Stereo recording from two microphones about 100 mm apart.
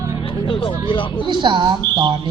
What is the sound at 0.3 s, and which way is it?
Speech, 60° left (ahead or behind).